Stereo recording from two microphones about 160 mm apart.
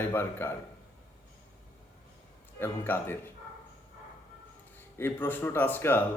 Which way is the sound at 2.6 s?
15° left (ahead or behind).